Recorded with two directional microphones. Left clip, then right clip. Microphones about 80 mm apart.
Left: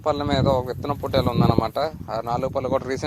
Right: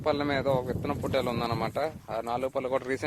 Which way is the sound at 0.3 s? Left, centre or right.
Left.